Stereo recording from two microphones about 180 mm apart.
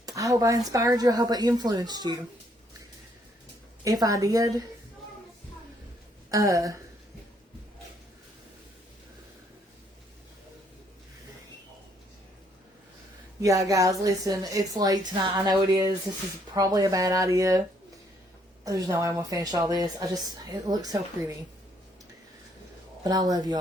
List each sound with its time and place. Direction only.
0.0 s speech: 20° right (ahead or behind)
3.8 s speech: 20° right (ahead or behind)
6.3 s speech: 20° right (ahead or behind)
13.4 s speech: 20° right (ahead or behind)
18.6 s speech: 20° right (ahead or behind)
23.0 s speech: 20° right (ahead or behind)